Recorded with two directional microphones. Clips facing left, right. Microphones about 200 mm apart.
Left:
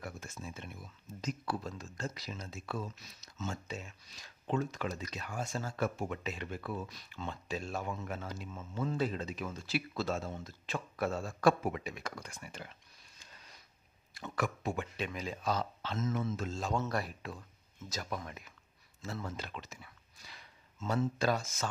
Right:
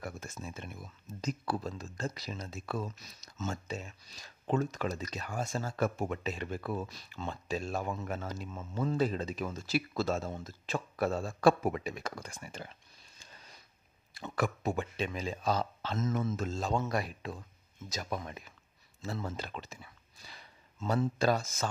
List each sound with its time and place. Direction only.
0.0 s speech: 45° right (ahead or behind)
14.2 s speech: 35° right (ahead or behind)
16.8 s speech: 15° right (ahead or behind); by 21.6 s 35° right (ahead or behind)